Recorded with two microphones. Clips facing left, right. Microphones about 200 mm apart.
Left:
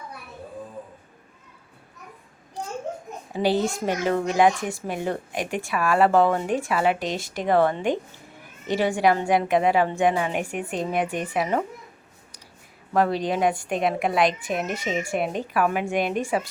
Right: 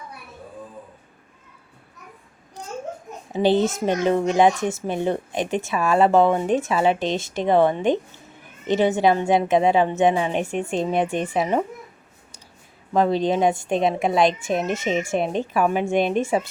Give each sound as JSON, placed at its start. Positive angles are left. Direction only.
{"t": 3.3, "sound": "a child's voice", "side_deg": -20}
{"t": 12.9, "sound": "a child's voice", "side_deg": -25}